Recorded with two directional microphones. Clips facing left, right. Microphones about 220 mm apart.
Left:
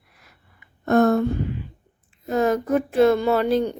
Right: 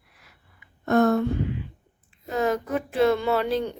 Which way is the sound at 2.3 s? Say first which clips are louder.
Left 5 dB; 45° left (ahead or behind).